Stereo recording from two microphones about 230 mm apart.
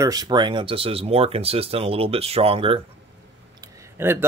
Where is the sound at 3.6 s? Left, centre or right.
Centre.